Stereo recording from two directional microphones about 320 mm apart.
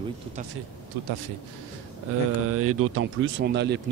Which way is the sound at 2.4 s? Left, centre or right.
Right.